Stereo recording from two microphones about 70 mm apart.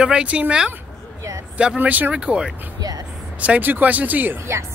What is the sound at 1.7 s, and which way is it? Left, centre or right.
Speech, right.